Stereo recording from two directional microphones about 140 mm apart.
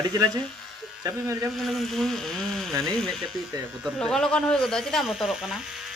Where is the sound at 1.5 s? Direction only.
Centre (ahead or behind).